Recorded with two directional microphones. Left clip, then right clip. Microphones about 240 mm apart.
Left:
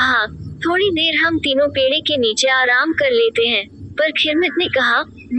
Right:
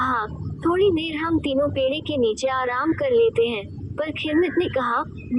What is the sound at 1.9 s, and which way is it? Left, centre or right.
Speech, left.